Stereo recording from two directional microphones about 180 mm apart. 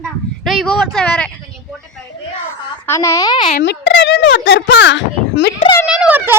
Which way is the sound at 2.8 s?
15° left (ahead or behind).